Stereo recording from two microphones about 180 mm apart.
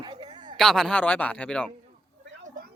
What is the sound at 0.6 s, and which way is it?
Speech, 5° left (ahead or behind).